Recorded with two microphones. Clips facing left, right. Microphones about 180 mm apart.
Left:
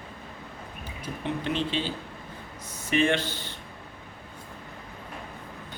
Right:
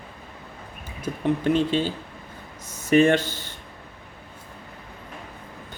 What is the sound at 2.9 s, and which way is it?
Speech, 45° right (ahead or behind).